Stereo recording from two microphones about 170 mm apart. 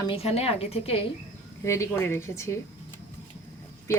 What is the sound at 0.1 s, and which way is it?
Speech, 35° left (ahead or behind).